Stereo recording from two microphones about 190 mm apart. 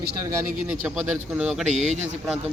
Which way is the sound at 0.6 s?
5° right (ahead or behind).